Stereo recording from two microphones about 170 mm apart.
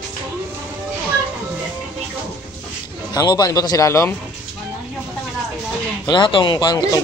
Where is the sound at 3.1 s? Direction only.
20° left (ahead or behind).